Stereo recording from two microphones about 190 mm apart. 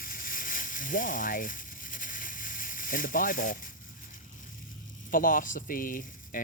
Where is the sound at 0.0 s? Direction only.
50° left (ahead or behind).